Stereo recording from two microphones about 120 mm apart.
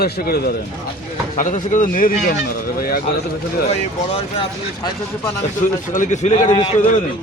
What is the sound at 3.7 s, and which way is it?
Speech, 60° left (ahead or behind).